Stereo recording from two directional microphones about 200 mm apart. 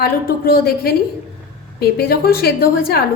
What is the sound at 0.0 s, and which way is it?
A woman's voice, 50° left (ahead or behind).